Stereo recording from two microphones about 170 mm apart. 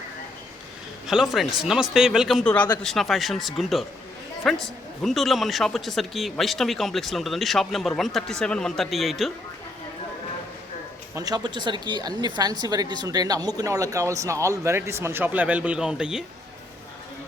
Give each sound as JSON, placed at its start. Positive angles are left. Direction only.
{"t": 1.0, "sound": "speech", "side_deg": -5}
{"t": 11.1, "sound": "a woman's voice", "side_deg": -20}